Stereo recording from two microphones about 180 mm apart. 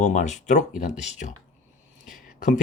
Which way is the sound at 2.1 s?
50° left (ahead or behind).